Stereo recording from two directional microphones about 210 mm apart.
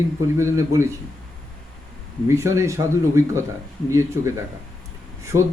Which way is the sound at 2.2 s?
15° right (ahead or behind).